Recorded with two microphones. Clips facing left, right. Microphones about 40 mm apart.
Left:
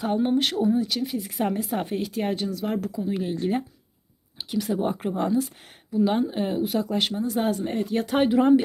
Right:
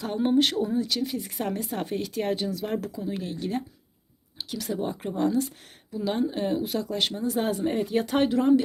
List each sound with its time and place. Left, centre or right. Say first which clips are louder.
0.2 s speech: right 4 dB; centre
4.4 s speech: left 4 dB; centre
8.4 s speech: left 3 dB; left